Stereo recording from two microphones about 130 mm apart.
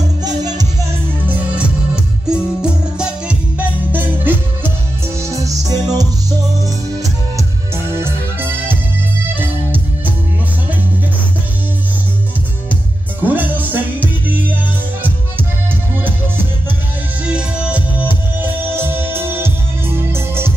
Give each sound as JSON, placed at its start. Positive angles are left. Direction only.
{"t": 2.2, "sound": "music", "side_deg": -5}
{"t": 13.2, "sound": "music", "side_deg": -15}
{"t": 17.2, "sound": "music", "side_deg": -10}